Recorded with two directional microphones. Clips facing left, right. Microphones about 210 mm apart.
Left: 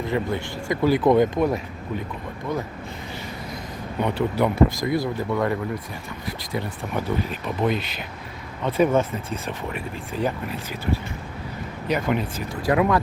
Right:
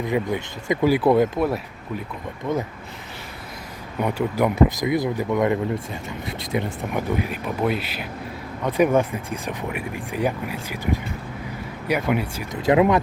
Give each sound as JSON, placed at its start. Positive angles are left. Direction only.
{"t": 0.1, "sound": "speech", "side_deg": -15}
{"t": 2.5, "sound": "speech", "side_deg": -20}
{"t": 4.0, "sound": "speech", "side_deg": -10}
{"t": 12.6, "sound": "speech", "side_deg": -20}